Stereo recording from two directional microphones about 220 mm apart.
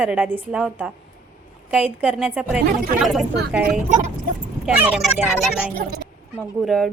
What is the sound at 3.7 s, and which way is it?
Speech, 35° right (ahead or behind).